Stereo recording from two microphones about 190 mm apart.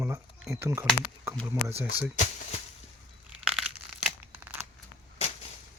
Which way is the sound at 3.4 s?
5° right (ahead or behind).